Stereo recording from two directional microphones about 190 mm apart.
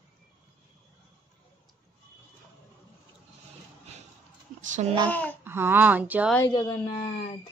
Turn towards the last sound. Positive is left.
turn(degrees=25)  # may be behind; listen again after turning